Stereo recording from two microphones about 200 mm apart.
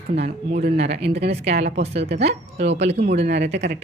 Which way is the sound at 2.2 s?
60° right (ahead or behind).